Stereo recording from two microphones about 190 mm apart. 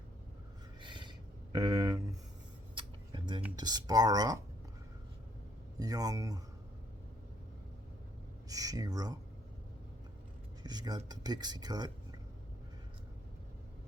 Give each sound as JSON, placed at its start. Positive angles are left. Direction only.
{"t": 0.8, "sound": "a sound", "side_deg": -25}
{"t": 1.5, "sound": "speech", "side_deg": -20}
{"t": 2.7, "sound": "a sound", "side_deg": -25}
{"t": 3.5, "sound": "speech", "side_deg": -20}
{"t": 5.8, "sound": "speech", "side_deg": -20}
{"t": 8.4, "sound": "speech", "side_deg": -20}
{"t": 10.6, "sound": "speech", "side_deg": -20}